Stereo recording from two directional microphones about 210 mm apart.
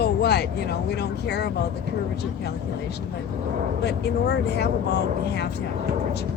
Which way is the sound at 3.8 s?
50° left (ahead or behind).